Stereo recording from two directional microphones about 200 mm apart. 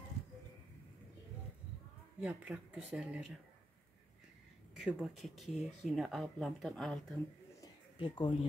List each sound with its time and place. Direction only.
2.1 s speech: 5° right (ahead or behind)
4.7 s speech: 5° right (ahead or behind)
7.6 s a sound: 20° left (ahead or behind)